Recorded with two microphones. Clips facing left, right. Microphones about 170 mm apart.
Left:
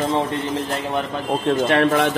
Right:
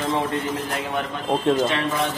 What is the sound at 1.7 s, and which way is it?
Speech, 60° left (ahead or behind).